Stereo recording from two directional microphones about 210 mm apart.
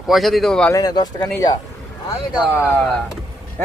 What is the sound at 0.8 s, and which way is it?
Speech, 20° left (ahead or behind).